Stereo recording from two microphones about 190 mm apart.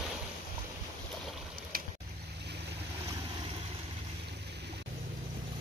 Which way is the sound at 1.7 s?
50° right (ahead or behind).